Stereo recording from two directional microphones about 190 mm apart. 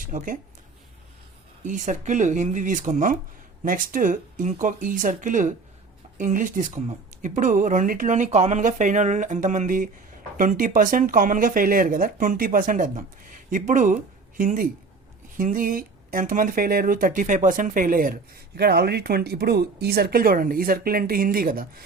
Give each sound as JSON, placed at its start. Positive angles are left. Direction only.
{"t": 0.0, "sound": "speech", "side_deg": -45}
{"t": 1.6, "sound": "speech", "side_deg": -40}